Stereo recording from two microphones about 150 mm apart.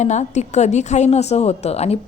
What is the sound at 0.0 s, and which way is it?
A woman's voice, 50° left (ahead or behind).